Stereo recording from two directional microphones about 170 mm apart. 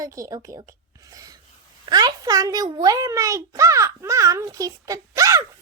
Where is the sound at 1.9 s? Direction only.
25° right (ahead or behind).